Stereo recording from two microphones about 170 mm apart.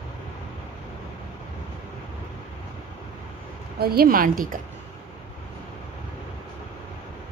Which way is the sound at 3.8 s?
65° right (ahead or behind).